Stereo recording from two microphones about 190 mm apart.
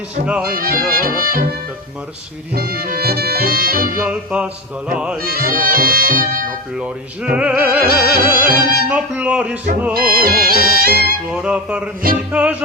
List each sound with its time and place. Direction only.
0.5 s speech: 50° right (ahead or behind)
2.6 s speech: 50° right (ahead or behind)
4.0 s music: 5° right (ahead or behind)
5.2 s speech: 50° right (ahead or behind)
6.7 s music: 5° right (ahead or behind)
7.8 s speech: 50° right (ahead or behind)
8.9 s music: 5° right (ahead or behind)
9.9 s speech: 50° right (ahead or behind)
11.3 s music: 5° right (ahead or behind)